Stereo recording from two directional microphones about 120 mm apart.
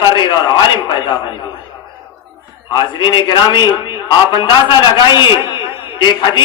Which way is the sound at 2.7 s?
40° left (ahead or behind).